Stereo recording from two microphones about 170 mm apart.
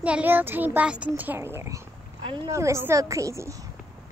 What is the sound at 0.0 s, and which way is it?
A child's voice, 10° right (ahead or behind).